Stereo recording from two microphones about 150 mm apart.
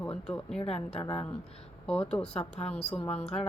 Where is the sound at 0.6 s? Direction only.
45° left (ahead or behind).